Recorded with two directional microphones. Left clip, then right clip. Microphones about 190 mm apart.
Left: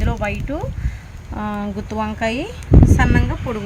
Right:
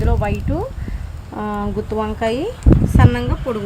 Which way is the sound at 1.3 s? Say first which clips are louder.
Right 3 dB; 35° left (ahead or behind).